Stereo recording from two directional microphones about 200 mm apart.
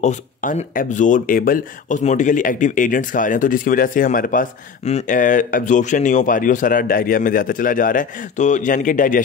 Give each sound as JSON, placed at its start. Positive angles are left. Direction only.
{"t": 0.0, "sound": "speech", "side_deg": 40}